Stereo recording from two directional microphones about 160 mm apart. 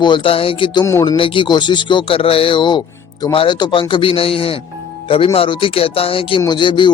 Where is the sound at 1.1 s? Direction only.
30° left (ahead or behind).